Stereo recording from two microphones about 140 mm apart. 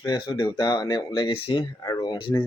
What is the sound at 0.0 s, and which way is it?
Speech, 30° left (ahead or behind).